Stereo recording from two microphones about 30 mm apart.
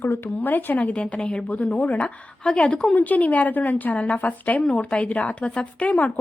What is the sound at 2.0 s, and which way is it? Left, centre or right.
Speech, left.